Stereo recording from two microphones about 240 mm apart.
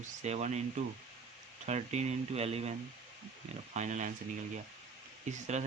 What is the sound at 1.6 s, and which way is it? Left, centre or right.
Speech, right.